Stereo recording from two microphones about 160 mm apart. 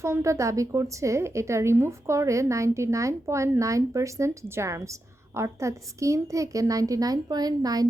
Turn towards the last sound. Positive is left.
turn(degrees=-25)  # may be behind; listen again after turning